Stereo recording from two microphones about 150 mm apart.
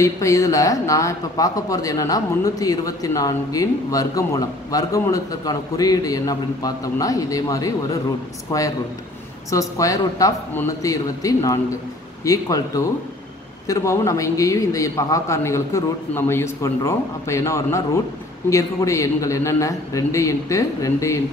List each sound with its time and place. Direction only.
0.0 s speech: 20° left (ahead or behind)